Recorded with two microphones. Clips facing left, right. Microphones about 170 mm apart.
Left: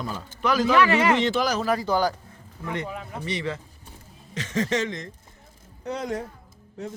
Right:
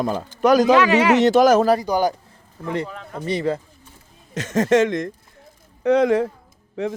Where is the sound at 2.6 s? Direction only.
30° right (ahead or behind).